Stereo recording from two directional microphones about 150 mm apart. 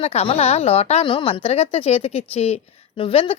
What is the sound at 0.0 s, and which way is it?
A woman's voice, 45° left (ahead or behind).